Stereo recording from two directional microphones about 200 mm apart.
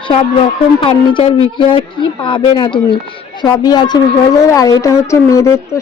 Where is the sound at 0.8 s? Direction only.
25° left (ahead or behind).